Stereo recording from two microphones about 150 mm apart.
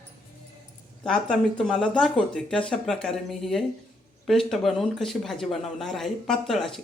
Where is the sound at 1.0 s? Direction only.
5° left (ahead or behind).